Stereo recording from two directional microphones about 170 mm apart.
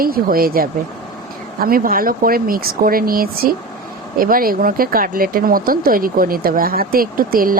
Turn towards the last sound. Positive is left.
turn(degrees=-55)  # may be behind; listen again after turning